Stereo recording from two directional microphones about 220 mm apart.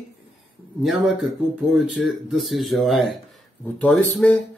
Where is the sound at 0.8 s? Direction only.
Centre (ahead or behind).